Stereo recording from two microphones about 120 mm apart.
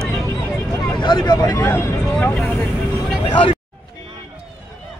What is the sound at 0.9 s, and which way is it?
Speech, 40° left (ahead or behind).